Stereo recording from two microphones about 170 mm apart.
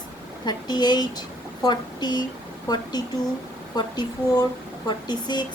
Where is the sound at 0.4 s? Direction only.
25° left (ahead or behind).